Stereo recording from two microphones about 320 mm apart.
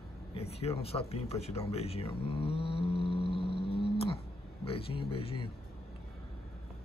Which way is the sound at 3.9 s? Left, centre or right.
Centre.